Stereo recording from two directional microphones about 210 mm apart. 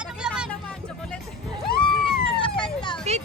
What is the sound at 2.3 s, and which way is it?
Emergency vehicle, 25° left (ahead or behind).